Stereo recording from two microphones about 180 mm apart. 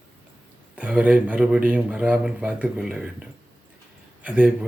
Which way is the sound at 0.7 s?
5° right (ahead or behind).